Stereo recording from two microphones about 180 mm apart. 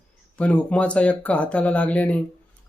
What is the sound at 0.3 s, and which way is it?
Speech, 5° left (ahead or behind).